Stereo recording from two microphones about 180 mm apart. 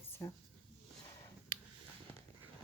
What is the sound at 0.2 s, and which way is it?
Speech, 15° left (ahead or behind).